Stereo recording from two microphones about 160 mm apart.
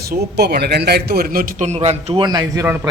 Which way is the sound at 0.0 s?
80° right.